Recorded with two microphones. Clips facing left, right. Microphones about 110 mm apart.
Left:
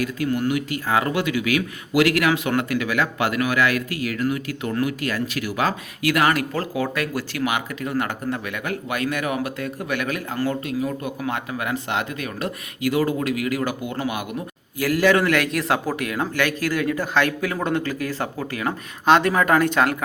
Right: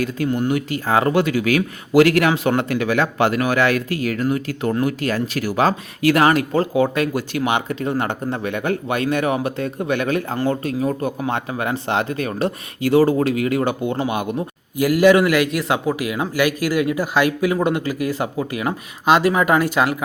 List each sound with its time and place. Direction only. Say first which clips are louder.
0.0 s speech: right 2 dB; 30° right (ahead or behind)
14.8 s speech: right 5 dB; 15° right (ahead or behind)